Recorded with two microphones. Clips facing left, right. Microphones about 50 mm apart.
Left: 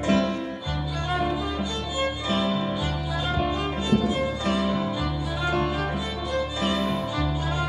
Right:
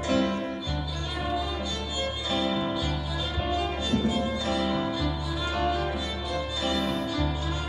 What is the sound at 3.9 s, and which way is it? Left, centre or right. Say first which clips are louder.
Music: left 4 dB; left.